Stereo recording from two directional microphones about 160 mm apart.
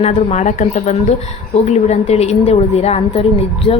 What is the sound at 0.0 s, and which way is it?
A woman's voice, 40° left (ahead or behind).